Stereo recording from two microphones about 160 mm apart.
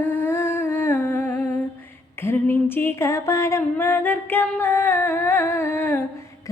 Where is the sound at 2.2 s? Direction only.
15° left (ahead or behind).